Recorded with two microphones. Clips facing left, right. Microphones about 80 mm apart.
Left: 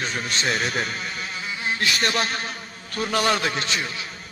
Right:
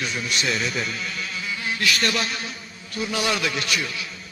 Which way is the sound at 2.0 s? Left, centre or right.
Left.